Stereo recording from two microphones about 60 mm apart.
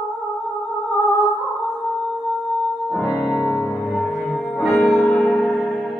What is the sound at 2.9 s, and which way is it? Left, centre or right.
Music, centre.